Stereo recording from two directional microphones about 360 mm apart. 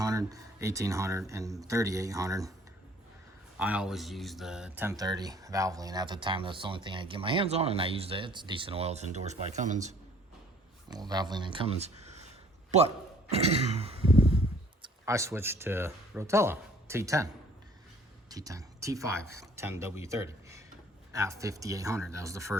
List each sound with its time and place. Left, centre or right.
0.0 s speech: centre
3.6 s speech: centre
13.3 s speech: centre
18.3 s speech: centre